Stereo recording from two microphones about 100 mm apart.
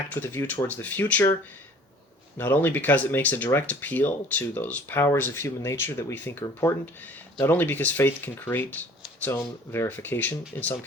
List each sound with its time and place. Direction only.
0.1 s speech: 20° left (ahead or behind)
2.4 s speech: 20° left (ahead or behind)